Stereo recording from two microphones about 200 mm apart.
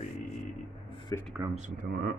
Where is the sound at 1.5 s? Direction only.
40° right (ahead or behind).